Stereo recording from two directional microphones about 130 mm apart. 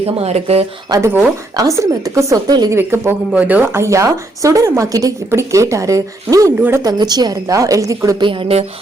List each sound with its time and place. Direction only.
0.0 s speech: 50° right (ahead or behind)
0.9 s a woman's voice: 25° right (ahead or behind)
2.7 s a woman's voice: 20° right (ahead or behind)
6.8 s a woman's voice: 30° right (ahead or behind)
8.2 s speech: 40° right (ahead or behind)